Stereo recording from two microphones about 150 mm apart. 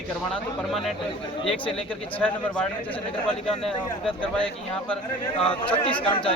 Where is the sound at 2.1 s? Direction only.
10° left (ahead or behind).